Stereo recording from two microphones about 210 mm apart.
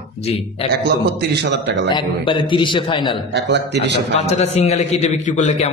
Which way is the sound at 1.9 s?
20° left (ahead or behind).